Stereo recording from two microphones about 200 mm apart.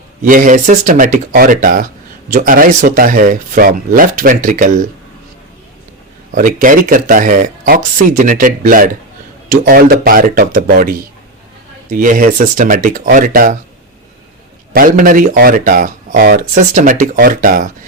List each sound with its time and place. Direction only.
0.3 s speech: 40° right (ahead or behind)
6.3 s speech: 40° right (ahead or behind)
14.7 s speech: 45° right (ahead or behind)